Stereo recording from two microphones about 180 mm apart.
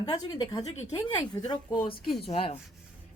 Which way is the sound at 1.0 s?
25° left (ahead or behind).